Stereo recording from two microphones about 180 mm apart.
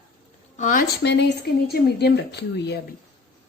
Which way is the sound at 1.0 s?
70° left (ahead or behind).